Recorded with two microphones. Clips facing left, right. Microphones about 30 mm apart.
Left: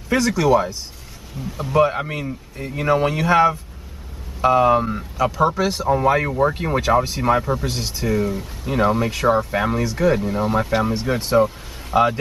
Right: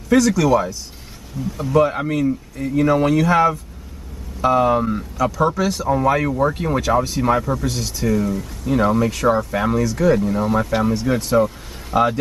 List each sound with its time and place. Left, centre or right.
0.1 s speech: centre
4.4 s speech: centre